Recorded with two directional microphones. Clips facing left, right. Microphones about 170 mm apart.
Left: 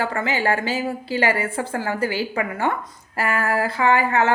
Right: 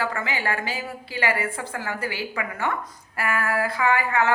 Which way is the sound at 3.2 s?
30° left (ahead or behind).